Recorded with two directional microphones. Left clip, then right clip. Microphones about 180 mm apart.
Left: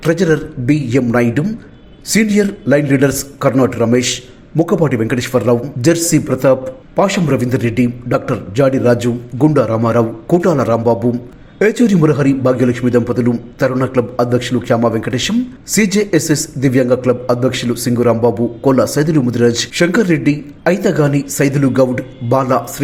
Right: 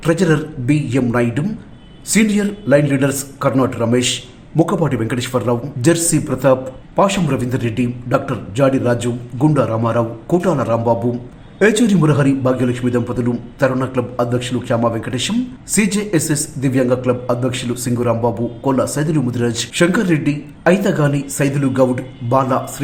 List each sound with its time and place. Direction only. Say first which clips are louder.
0.0 s a man's voice: left 2 dB; 15° left (ahead or behind)